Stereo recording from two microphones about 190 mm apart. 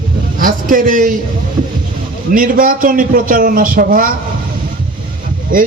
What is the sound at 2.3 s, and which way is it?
A man's voice, 45° right (ahead or behind).